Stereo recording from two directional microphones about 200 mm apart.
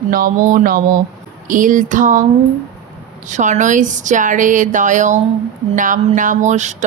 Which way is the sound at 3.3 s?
35° right (ahead or behind).